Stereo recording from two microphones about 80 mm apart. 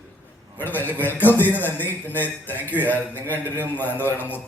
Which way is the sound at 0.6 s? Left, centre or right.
Left.